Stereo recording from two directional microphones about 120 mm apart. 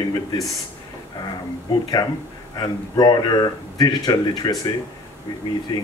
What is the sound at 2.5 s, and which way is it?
Speech, 35° left (ahead or behind).